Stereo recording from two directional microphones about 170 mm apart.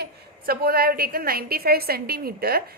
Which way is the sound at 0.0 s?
65° right (ahead or behind).